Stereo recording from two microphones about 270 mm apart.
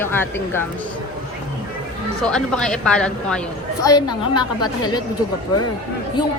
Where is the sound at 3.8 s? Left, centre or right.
Centre.